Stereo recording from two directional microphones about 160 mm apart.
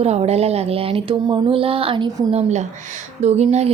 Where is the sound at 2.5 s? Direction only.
45° right (ahead or behind).